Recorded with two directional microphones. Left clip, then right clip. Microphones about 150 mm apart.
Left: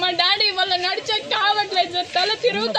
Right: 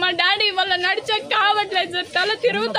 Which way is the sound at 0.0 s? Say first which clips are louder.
Even; 40° right (ahead or behind).